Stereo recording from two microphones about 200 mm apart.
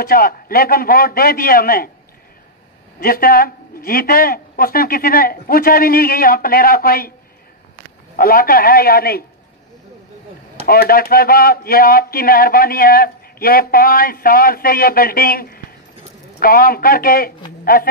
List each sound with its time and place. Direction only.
0.0 s speech: 45° left (ahead or behind)
3.0 s speech: 45° left (ahead or behind)
8.2 s speech: 45° left (ahead or behind)
10.7 s speech: 50° left (ahead or behind)